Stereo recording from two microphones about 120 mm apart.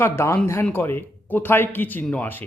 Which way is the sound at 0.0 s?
20° left (ahead or behind).